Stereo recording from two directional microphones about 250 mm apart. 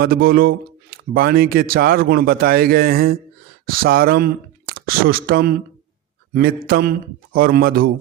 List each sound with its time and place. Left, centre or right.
0.0 s speech: right